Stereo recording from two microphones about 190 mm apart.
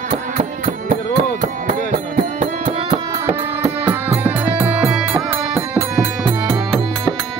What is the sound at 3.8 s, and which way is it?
Music, 10° right (ahead or behind).